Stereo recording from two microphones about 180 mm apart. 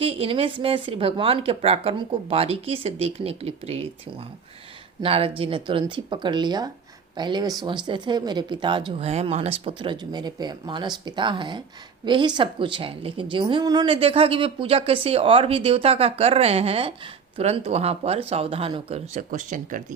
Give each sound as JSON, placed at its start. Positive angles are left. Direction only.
{"t": 0.0, "sound": "a woman's voice", "side_deg": -30}
{"t": 5.0, "sound": "a woman's voice", "side_deg": -30}
{"t": 19.3, "sound": "speech", "side_deg": -45}